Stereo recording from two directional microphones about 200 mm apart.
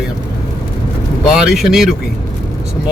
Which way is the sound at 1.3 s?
Centre (ahead or behind).